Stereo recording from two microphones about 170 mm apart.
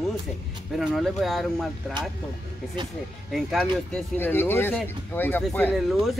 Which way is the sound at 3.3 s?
Centre (ahead or behind).